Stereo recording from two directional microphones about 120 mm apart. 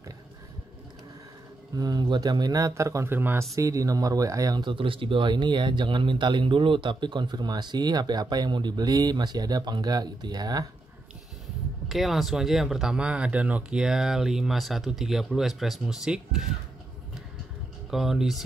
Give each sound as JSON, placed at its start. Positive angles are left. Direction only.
{"t": 1.8, "sound": "speech", "side_deg": -35}
{"t": 11.9, "sound": "speech", "side_deg": 0}
{"t": 17.8, "sound": "speech", "side_deg": 0}